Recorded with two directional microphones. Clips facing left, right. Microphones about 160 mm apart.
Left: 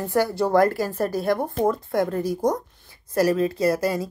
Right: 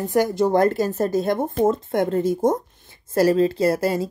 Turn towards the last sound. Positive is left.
turn(degrees=-25)  # may be behind; listen again after turning